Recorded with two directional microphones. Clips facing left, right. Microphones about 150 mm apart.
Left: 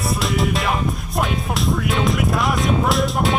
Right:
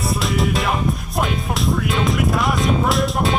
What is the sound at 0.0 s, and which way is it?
Music, centre (ahead or behind).